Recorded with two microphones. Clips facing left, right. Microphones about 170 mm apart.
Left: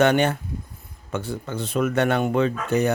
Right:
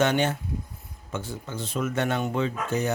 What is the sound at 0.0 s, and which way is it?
Speech, 60° left (ahead or behind).